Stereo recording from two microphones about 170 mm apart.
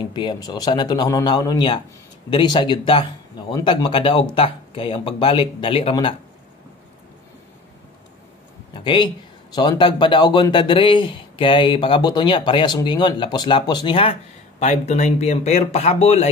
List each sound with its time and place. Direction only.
0.0 s speech: 25° left (ahead or behind)
8.7 s speech: 30° left (ahead or behind)
14.6 s speech: 40° left (ahead or behind)